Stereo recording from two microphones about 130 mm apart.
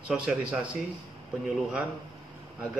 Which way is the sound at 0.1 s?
10° right (ahead or behind).